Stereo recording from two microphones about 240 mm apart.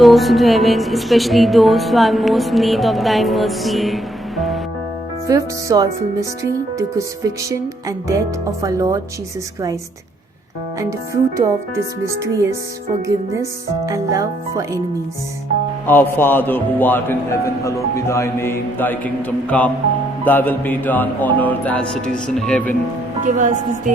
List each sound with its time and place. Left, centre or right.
0.0 s speech: centre
5.3 s speech: centre
10.8 s speech: centre
15.9 s music: centre
23.2 s speech: right